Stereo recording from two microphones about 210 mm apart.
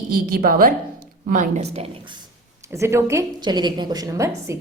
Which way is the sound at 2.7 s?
15° right (ahead or behind).